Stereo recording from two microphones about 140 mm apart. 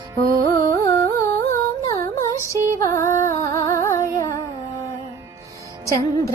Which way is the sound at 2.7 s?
20° left (ahead or behind).